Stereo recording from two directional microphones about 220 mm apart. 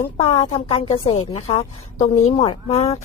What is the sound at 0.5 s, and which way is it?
Speech, 25° left (ahead or behind).